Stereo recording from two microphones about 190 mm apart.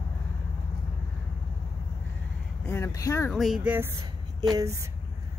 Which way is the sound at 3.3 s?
Centre (ahead or behind).